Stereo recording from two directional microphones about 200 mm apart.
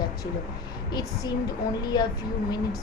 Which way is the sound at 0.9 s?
20° left (ahead or behind).